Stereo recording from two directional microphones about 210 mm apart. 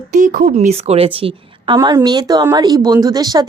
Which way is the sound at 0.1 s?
35° right (ahead or behind).